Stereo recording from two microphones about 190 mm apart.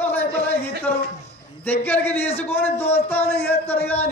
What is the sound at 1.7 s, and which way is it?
Speech, 10° left (ahead or behind).